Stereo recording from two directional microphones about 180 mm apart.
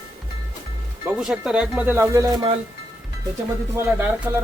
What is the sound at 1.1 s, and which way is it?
Speech, centre (ahead or behind).